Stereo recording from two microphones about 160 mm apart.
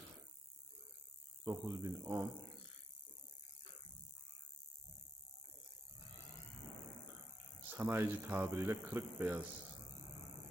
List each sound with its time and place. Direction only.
1.5 s a man's voice: 15° right (ahead or behind)
7.7 s a man's voice: 15° right (ahead or behind)